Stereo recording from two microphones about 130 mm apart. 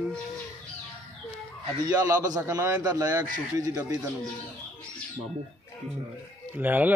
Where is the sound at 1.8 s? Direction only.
25° right (ahead or behind).